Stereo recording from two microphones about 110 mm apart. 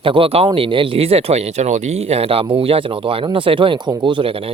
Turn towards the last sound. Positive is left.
turn(degrees=-55)  # may be behind; listen again after turning